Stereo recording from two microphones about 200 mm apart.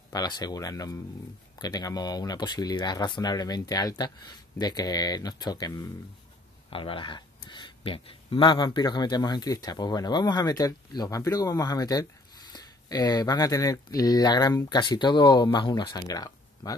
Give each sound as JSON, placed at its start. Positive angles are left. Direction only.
{"t": 0.1, "sound": "a man's voice", "side_deg": 20}